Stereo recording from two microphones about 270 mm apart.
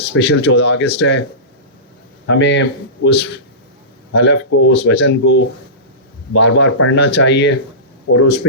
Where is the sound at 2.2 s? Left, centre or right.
Left.